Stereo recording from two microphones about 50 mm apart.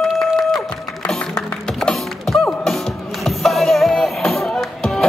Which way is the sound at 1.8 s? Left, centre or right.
Centre.